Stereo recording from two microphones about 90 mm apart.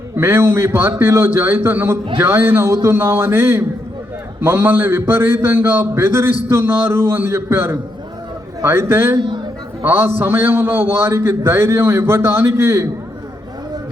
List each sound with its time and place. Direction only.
0.2 s a man's voice: 25° right (ahead or behind)
9.1 s a man's voice: 60° right (ahead or behind)
9.8 s a man's voice: 25° right (ahead or behind)